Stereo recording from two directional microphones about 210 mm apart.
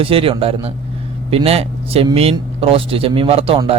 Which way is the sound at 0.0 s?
25° right (ahead or behind).